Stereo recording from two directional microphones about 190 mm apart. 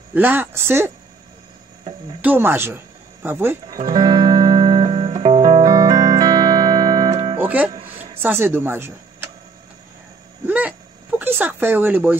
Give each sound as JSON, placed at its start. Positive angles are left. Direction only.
{"t": 0.1, "sound": "speech", "side_deg": -10}
{"t": 2.2, "sound": "speech", "side_deg": -10}
{"t": 3.6, "sound": "music", "side_deg": -20}
{"t": 7.3, "sound": "music", "side_deg": -10}
{"t": 8.2, "sound": "speech", "side_deg": -10}
{"t": 10.4, "sound": "a sound", "side_deg": -10}